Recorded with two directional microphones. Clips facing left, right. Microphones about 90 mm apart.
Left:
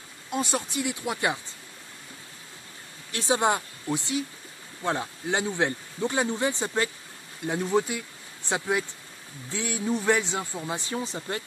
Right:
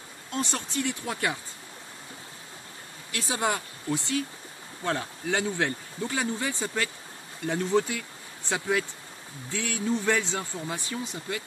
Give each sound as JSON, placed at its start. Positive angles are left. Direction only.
{"t": 0.3, "sound": "speech", "side_deg": 10}
{"t": 3.1, "sound": "speech", "side_deg": 25}
{"t": 7.4, "sound": "speech", "side_deg": 15}